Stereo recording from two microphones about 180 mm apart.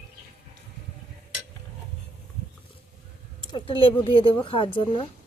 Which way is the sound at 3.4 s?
25° left (ahead or behind).